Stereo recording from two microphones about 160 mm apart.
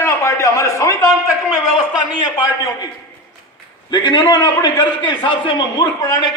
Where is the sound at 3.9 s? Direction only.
30° left (ahead or behind).